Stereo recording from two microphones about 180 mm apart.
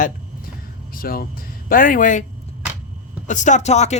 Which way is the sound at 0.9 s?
55° left (ahead or behind).